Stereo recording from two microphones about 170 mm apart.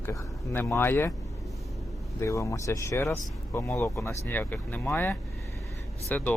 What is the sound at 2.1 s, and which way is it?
Speech, 15° left (ahead or behind).